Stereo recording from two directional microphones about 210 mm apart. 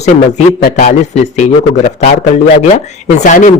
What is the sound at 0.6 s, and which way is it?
Speech, 45° left (ahead or behind).